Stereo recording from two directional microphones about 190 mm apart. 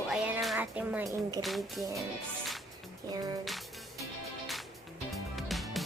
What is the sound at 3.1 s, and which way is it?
Speech, 20° right (ahead or behind).